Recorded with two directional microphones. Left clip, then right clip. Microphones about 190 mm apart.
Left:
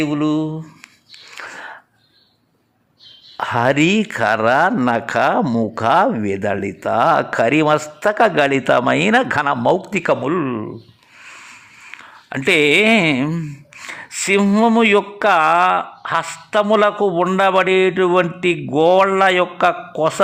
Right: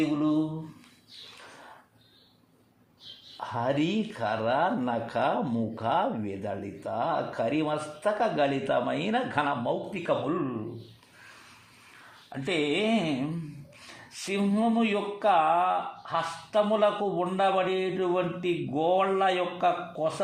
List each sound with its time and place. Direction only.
3.3 s speech: 40° left (ahead or behind)
12.3 s speech: 45° left (ahead or behind)